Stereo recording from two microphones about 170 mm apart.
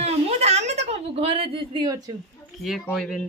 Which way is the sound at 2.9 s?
Centre (ahead or behind).